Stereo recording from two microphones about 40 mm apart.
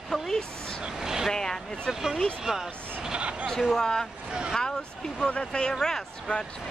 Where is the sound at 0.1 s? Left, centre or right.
Centre.